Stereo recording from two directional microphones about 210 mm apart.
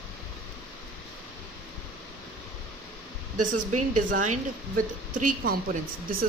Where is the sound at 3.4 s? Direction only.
40° right (ahead or behind).